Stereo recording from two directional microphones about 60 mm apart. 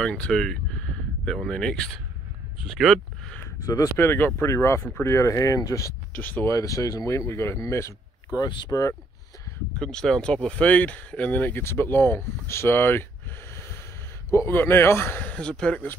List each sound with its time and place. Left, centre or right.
0.0 s speech: centre
2.7 s speech: centre
3.6 s speech: left
4.0 s speech: left
6.1 s speech: left
6.5 s speech: left
7.1 s speech: left
8.3 s speech: left
9.8 s speech: centre; by 11.6 s left
11.6 s speech: left
14.5 s speech: left
15.2 s speech: centre